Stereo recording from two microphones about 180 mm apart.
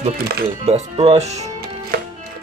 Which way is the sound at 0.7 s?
35° right (ahead or behind).